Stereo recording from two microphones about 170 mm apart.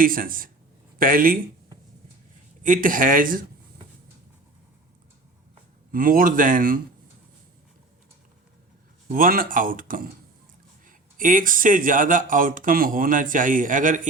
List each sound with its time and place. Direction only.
0.0 s speech: 55° right (ahead or behind)
2.6 s speech: 55° right (ahead or behind)
5.9 s speech: 55° right (ahead or behind)
9.1 s speech: 55° right (ahead or behind)